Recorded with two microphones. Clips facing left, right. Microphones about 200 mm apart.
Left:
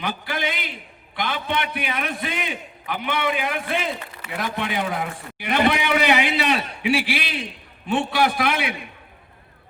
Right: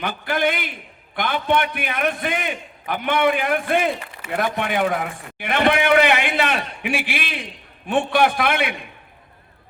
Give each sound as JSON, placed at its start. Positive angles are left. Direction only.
{"t": 0.0, "sound": "a man's voice", "side_deg": -55}